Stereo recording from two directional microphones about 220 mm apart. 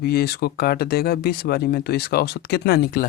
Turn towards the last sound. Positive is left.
turn(degrees=45)  # may be behind; listen again after turning